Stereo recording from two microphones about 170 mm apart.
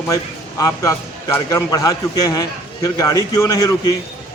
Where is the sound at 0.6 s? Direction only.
15° left (ahead or behind).